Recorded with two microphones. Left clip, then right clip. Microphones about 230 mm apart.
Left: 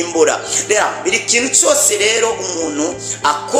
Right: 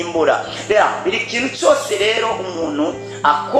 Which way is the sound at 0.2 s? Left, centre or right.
Left.